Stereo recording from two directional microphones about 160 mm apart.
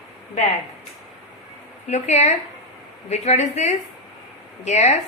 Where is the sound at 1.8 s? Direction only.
45° left (ahead or behind).